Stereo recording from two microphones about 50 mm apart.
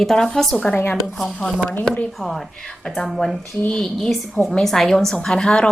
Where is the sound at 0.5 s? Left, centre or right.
Left.